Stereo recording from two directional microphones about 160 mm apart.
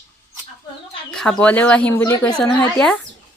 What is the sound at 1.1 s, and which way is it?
Speech, 5° left (ahead or behind).